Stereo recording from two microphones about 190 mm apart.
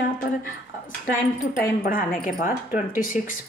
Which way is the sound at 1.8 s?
45° left (ahead or behind).